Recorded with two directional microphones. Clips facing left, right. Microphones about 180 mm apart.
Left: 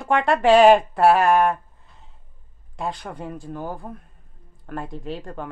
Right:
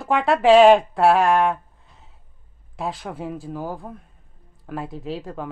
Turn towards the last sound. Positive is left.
turn(degrees=0)  # may be behind; listen again after turning